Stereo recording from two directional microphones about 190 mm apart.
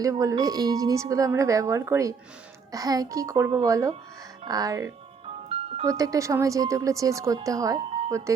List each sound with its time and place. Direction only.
0.0 s a woman's voice: 15° right (ahead or behind)
5.2 s music: 30° right (ahead or behind)
5.8 s a woman's voice: 15° right (ahead or behind)